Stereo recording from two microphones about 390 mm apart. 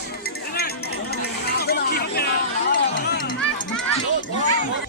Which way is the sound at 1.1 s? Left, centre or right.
Left.